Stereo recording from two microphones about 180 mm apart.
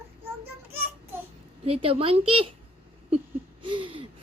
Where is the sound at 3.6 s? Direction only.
30° right (ahead or behind).